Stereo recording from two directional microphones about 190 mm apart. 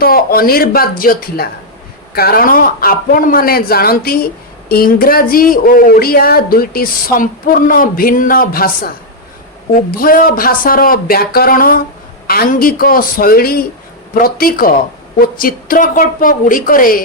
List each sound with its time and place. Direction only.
0.0 s speech: 50° left (ahead or behind)
9.9 s speech: 50° left (ahead or behind)